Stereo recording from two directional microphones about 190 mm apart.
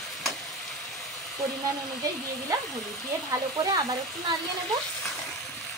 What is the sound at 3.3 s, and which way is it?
Speech, 15° right (ahead or behind).